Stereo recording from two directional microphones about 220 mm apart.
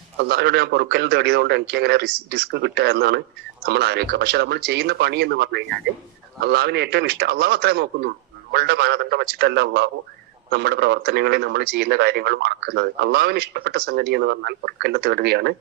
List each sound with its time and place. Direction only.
0.2 s a man's voice: 50° right (ahead or behind)